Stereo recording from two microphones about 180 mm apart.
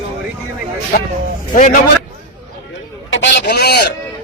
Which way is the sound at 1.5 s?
50° left (ahead or behind).